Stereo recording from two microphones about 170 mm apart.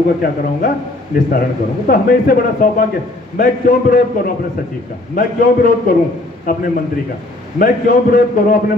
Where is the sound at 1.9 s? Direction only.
60° left (ahead or behind).